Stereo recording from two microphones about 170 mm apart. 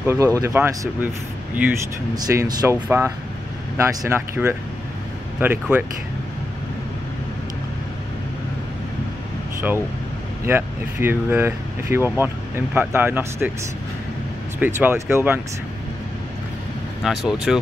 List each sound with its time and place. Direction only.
0.0 s speech: 15° right (ahead or behind)
2.1 s speech: 20° right (ahead or behind)
10.4 s speech: 15° right (ahead or behind)
14.6 s speech: 10° right (ahead or behind)
17.0 s speech: centre (ahead or behind)